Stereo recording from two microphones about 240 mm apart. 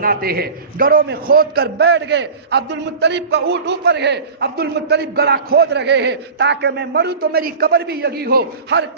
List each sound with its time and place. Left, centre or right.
0.0 s a man's voice: right